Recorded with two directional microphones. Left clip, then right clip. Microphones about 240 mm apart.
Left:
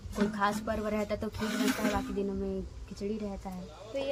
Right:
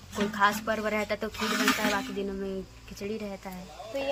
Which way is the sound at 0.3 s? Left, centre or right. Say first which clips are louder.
Right 7 dB; centre.